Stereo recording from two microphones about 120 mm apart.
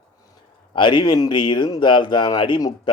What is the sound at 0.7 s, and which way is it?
Speech, 40° left (ahead or behind).